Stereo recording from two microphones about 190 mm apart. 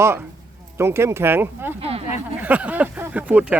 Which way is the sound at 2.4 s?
10° right (ahead or behind).